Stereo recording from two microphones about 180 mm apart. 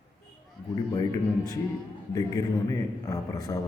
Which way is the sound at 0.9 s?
20° left (ahead or behind).